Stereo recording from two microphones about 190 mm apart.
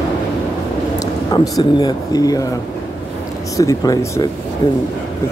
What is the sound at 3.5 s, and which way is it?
Speech, 20° left (ahead or behind).